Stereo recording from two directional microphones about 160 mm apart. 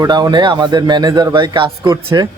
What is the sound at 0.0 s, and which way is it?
Speech, 25° right (ahead or behind).